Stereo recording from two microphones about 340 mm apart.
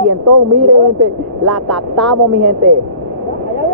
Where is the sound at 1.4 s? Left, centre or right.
Centre.